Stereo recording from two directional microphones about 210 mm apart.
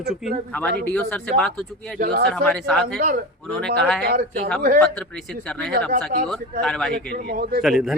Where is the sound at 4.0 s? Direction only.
45° right (ahead or behind).